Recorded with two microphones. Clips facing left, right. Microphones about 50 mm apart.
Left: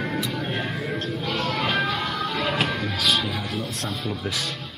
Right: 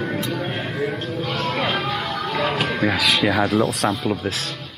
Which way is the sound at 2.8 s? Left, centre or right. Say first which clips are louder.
Right 6 dB; right.